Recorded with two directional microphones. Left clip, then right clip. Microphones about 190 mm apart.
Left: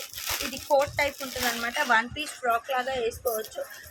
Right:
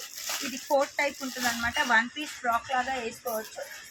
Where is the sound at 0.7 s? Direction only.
45° left (ahead or behind).